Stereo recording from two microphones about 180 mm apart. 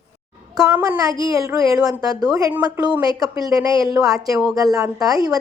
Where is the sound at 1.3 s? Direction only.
20° right (ahead or behind).